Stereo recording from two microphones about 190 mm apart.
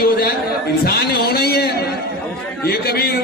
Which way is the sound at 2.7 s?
55° left (ahead or behind).